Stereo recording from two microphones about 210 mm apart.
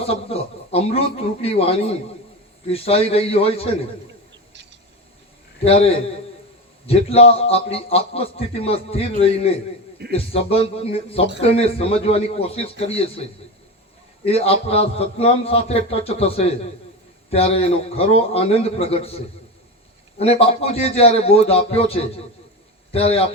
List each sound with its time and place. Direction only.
0.0 s a man's voice: 30° left (ahead or behind)
5.6 s a man's voice: 30° left (ahead or behind)
14.3 s a man's voice: 30° left (ahead or behind)